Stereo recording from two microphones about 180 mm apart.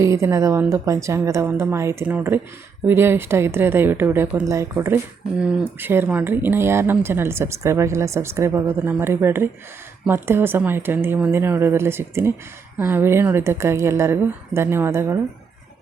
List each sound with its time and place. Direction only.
0.0 s speech: 15° right (ahead or behind)